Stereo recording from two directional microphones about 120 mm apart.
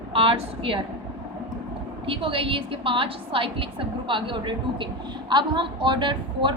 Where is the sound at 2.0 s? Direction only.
50° right (ahead or behind).